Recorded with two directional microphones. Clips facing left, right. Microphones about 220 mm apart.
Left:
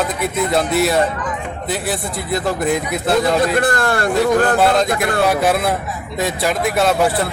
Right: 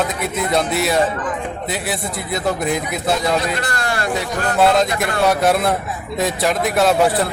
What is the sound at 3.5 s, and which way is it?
Speech, 50° left (ahead or behind).